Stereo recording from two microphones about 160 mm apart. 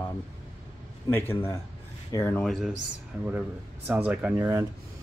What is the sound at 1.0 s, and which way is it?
Speech, 15° left (ahead or behind).